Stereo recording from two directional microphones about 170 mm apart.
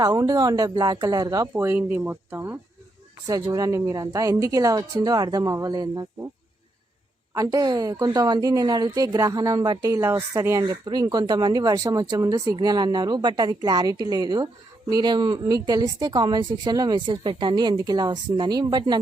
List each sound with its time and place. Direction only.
0.0 s a woman's voice: 20° right (ahead or behind)
7.3 s a woman's voice: 20° right (ahead or behind)